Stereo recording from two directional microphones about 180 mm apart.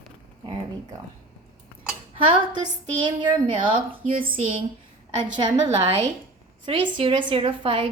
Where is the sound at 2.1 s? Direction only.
30° right (ahead or behind).